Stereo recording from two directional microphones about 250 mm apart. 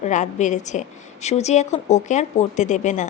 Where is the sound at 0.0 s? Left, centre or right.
Left.